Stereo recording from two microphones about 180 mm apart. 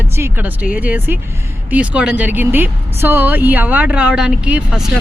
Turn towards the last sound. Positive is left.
turn(degrees=-5)  # may be behind; listen again after turning